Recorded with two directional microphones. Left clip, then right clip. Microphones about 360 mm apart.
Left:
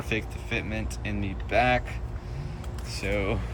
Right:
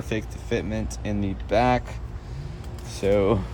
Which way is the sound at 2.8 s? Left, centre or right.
Right.